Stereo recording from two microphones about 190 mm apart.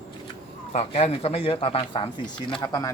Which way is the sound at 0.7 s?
35° left (ahead or behind).